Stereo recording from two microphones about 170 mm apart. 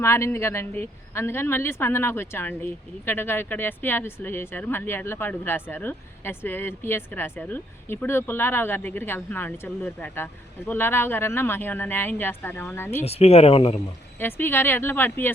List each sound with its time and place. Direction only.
0.0 s speech: 15° left (ahead or behind)
13.1 s speech: 35° left (ahead or behind)
14.2 s speech: 10° left (ahead or behind)